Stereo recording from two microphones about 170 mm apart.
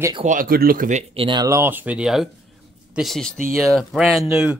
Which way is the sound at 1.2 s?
25° right (ahead or behind).